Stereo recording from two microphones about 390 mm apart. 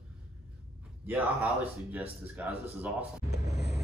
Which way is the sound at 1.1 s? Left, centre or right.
Centre.